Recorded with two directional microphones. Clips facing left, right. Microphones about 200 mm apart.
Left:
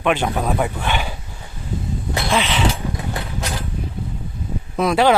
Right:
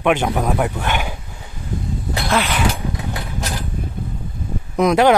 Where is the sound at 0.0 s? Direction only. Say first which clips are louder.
Right 2 dB; 15° right (ahead or behind).